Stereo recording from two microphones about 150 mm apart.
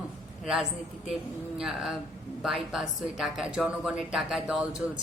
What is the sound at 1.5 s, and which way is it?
A woman's voice, centre (ahead or behind).